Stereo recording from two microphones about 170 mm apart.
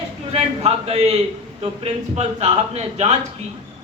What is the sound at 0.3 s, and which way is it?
Speech, 35° right (ahead or behind).